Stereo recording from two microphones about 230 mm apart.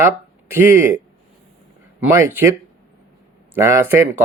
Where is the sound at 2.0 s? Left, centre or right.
Centre.